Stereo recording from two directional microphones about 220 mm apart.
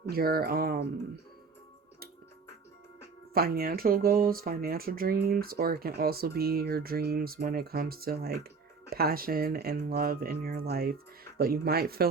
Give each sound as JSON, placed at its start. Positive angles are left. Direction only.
{"t": 0.0, "sound": "speech", "side_deg": -45}
{"t": 3.3, "sound": "speech", "side_deg": -45}